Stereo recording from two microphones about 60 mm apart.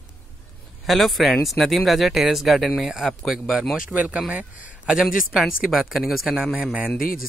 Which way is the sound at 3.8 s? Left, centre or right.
Right.